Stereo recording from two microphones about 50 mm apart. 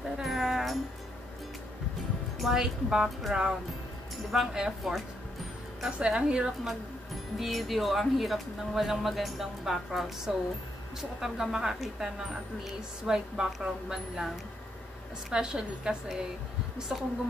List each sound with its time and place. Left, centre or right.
0.2 s a sound: centre
2.3 s music: centre
2.6 s a woman's voice: centre
4.6 s a woman's voice: centre
5.9 s a woman's voice: centre
7.3 s a woman's voice: centre
15.2 s a woman's voice: centre